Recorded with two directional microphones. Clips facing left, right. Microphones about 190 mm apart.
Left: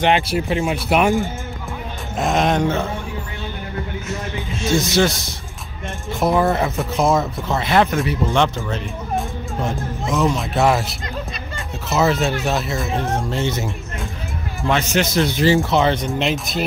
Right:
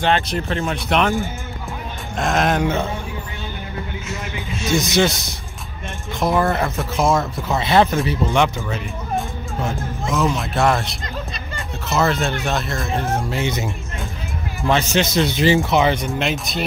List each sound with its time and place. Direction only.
0.0 s speech: 10° left (ahead or behind)
4.7 s speech: 15° right (ahead or behind)
6.1 s speech: centre (ahead or behind)
7.6 s speech: 30° right (ahead or behind)
8.5 s music: 5° right (ahead or behind)
10.1 s speech: centre (ahead or behind)
13.3 s speech: 15° right (ahead or behind)
14.7 s a man's voice: 30° right (ahead or behind)
15.1 s speech: 20° right (ahead or behind)
16.1 s speech: centre (ahead or behind)